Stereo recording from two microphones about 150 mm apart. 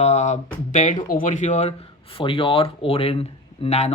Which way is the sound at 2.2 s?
35° left (ahead or behind).